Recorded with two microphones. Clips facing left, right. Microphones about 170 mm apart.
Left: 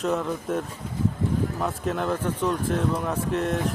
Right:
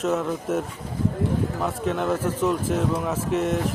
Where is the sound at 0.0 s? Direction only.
5° right (ahead or behind).